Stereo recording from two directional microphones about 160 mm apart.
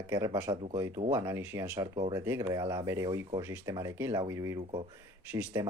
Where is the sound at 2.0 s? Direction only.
30° right (ahead or behind).